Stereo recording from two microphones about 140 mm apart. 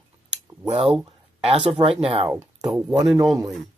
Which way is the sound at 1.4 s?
40° right (ahead or behind).